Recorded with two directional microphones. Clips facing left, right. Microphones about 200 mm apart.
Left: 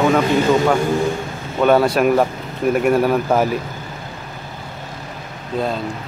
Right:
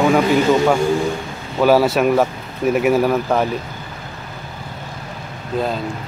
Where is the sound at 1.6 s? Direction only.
5° right (ahead or behind).